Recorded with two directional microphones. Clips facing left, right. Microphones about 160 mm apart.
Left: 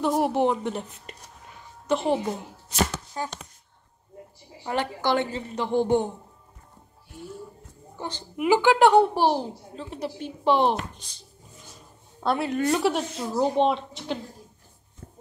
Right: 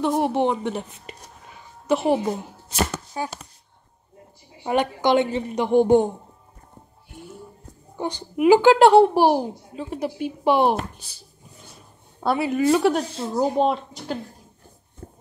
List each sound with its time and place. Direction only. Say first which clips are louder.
0.0 s a woman's voice: right 2 dB; centre (ahead or behind)
4.6 s a woman's voice: right 5 dB; 20° right (ahead or behind)
8.0 s a woman's voice: right 8 dB; 15° right (ahead or behind)
13.0 s speech: right 2 dB; 30° right (ahead or behind)
13.4 s speech: right 1 dB; 5° right (ahead or behind)
15.0 s a sound: right 5 dB; 40° right (ahead or behind)